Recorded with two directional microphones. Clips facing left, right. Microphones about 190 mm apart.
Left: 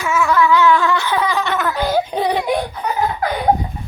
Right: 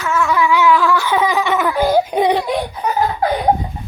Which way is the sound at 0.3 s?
15° right (ahead or behind).